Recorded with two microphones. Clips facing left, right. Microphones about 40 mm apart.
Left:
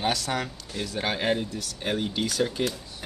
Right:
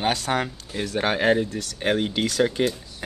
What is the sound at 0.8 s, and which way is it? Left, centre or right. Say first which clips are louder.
Speech: right 6 dB; right.